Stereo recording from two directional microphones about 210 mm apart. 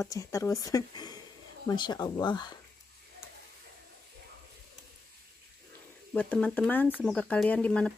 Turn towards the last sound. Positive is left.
turn(degrees=5)  # may be behind; listen again after turning